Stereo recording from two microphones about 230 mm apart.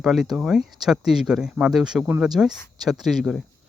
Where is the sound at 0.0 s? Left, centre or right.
Centre.